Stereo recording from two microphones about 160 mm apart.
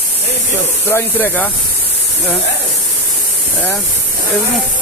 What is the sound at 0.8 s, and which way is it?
Speech, 15° left (ahead or behind).